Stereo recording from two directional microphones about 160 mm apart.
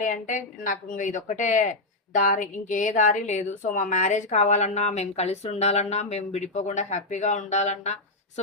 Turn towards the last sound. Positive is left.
turn(degrees=45)  # may be behind; listen again after turning